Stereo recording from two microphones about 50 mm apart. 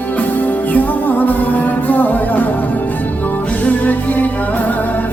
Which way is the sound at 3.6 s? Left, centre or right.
Left.